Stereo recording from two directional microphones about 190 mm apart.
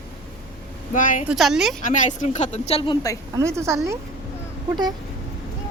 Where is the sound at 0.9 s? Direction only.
45° left (ahead or behind).